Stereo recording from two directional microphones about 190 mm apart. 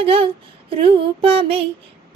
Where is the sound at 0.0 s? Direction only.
30° right (ahead or behind).